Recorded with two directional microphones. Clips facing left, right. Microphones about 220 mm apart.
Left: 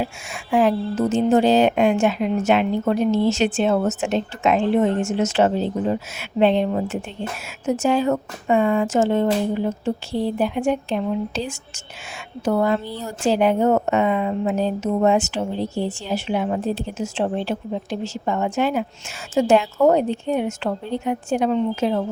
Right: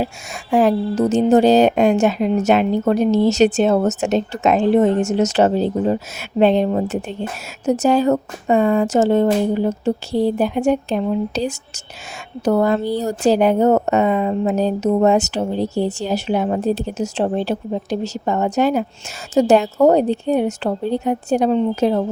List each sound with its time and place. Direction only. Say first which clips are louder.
0.5 s a woman's voice: right 3 dB; 40° right (ahead or behind)